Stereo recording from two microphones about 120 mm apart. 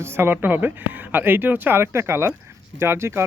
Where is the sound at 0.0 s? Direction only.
20° right (ahead or behind).